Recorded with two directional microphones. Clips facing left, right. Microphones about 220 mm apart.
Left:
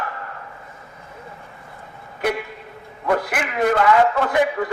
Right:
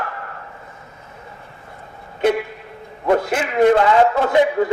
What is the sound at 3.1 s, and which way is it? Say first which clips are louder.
A man's voice: right 4 dB; 25° right (ahead or behind).